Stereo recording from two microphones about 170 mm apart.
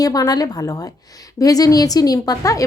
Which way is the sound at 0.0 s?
20° left (ahead or behind).